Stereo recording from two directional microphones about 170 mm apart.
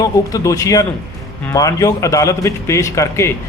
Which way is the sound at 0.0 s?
20° left (ahead or behind).